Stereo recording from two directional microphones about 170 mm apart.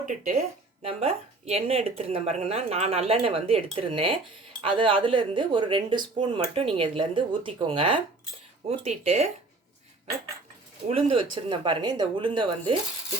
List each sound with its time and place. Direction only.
0.0 s speech: 50° right (ahead or behind)
0.8 s speech: 35° right (ahead or behind)
10.8 s speech: 35° right (ahead or behind)